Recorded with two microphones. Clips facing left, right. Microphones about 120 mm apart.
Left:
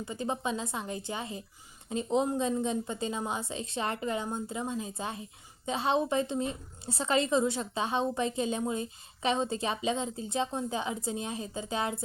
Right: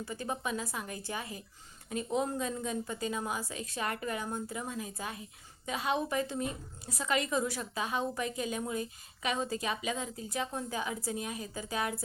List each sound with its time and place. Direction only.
0.0 s a woman's voice: 20° left (ahead or behind)